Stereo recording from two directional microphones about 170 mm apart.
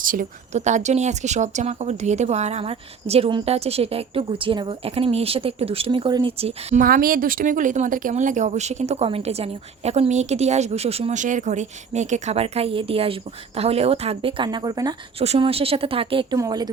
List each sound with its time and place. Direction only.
0.0 s a woman's voice: 50° right (ahead or behind)
6.8 s a woman's voice: 60° right (ahead or behind); by 14.9 s 25° right (ahead or behind)
15.2 s a woman's voice: 35° right (ahead or behind)